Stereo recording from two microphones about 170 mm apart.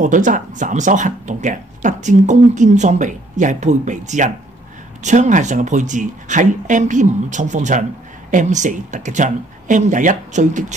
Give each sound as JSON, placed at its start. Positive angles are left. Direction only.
{"t": 0.0, "sound": "speech", "side_deg": -50}